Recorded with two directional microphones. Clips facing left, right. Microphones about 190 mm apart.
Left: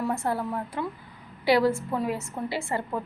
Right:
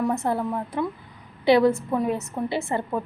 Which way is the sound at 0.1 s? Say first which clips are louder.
Right 3 dB; 20° right (ahead or behind).